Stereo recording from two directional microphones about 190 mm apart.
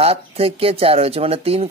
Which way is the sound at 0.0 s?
30° right (ahead or behind).